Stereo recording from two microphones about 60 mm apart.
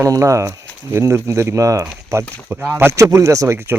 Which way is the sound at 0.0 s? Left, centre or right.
Right.